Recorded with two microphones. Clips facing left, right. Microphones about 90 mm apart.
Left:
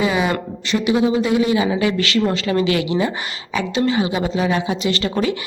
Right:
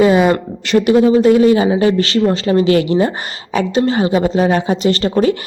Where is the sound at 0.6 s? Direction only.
60° right (ahead or behind).